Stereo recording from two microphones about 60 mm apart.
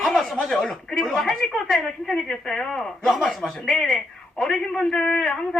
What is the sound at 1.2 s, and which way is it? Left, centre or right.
A woman's voice, centre.